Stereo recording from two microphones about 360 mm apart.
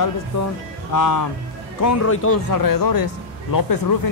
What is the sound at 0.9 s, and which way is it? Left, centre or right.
Speech, left.